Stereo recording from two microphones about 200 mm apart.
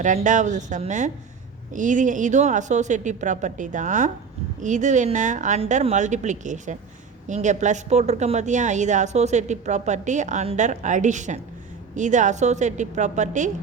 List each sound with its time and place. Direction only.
0.0 s a woman's voice: 40° right (ahead or behind)